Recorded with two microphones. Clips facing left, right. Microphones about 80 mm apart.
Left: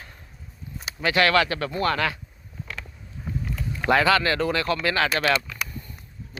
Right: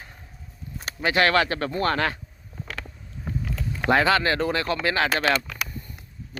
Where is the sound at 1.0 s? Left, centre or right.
Right.